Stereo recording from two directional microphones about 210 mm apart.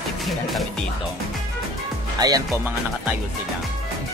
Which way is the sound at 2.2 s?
15° right (ahead or behind).